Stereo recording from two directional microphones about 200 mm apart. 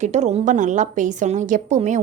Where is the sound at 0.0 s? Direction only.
35° right (ahead or behind).